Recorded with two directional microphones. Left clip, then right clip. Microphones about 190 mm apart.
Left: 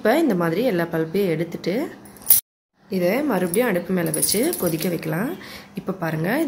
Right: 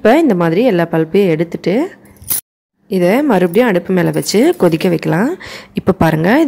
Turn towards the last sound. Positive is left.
turn(degrees=-45)  # may be behind; listen again after turning